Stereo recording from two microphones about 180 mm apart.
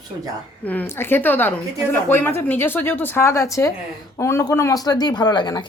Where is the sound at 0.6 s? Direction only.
10° left (ahead or behind).